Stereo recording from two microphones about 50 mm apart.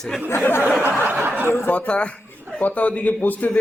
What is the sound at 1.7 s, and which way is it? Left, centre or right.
Speech, left.